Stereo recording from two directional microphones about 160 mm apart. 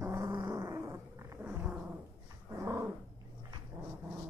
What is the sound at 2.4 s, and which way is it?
Dog, 15° right (ahead or behind).